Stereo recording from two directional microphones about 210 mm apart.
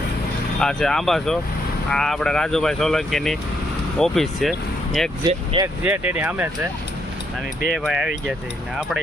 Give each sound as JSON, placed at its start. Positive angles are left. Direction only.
{"t": 0.6, "sound": "speech", "side_deg": 0}
{"t": 5.2, "sound": "speech", "side_deg": -20}
{"t": 5.8, "sound": "speech", "side_deg": -5}
{"t": 7.7, "sound": "speech", "side_deg": 0}